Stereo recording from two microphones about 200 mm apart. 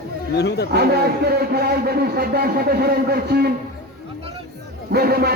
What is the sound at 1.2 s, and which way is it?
Speech, 50° right (ahead or behind).